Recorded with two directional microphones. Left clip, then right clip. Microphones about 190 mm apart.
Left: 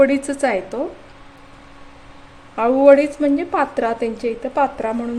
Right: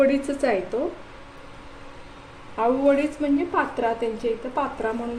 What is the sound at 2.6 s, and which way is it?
A woman's voice, 55° left (ahead or behind).